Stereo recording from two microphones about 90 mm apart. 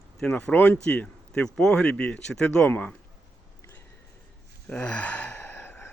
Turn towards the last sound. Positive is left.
turn(degrees=25)  # may be behind; listen again after turning